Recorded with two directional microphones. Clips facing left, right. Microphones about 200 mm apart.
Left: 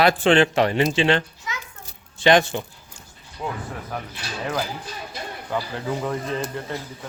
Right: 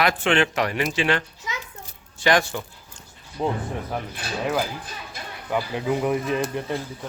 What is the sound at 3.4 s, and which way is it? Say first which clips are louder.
Speech: right 5 dB; 35° right (ahead or behind).